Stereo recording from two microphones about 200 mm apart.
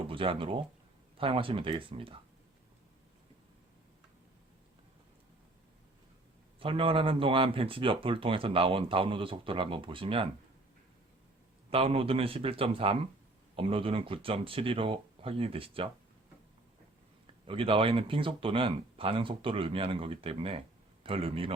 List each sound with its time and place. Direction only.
0.1 s speech: 25° right (ahead or behind)
6.6 s speech: 25° right (ahead or behind)
11.7 s speech: 30° right (ahead or behind)
17.4 s speech: 25° right (ahead or behind)